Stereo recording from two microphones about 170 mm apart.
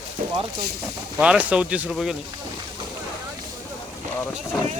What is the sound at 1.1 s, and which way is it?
Speech, 10° right (ahead or behind).